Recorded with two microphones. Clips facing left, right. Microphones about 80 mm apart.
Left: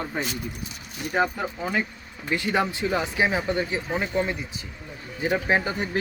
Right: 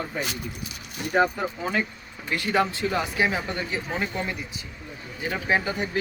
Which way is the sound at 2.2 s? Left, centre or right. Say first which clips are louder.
Even; centre.